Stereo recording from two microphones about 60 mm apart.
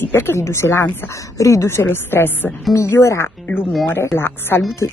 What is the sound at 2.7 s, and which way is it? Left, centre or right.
Speech, left.